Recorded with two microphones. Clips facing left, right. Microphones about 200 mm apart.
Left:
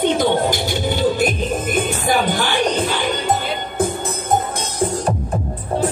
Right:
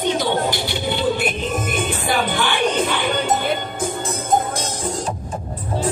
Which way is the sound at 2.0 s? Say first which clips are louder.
Left 1 dB; 40° left (ahead or behind).